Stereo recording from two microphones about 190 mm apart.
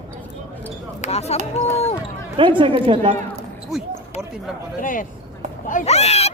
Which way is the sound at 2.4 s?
25° right (ahead or behind).